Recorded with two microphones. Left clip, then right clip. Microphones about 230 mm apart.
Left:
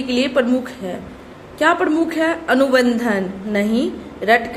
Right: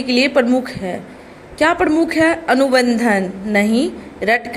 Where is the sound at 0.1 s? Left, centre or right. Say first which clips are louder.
Right 3 dB; right.